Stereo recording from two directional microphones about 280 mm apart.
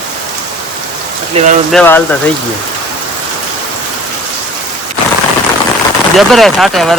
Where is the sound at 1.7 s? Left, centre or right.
Centre.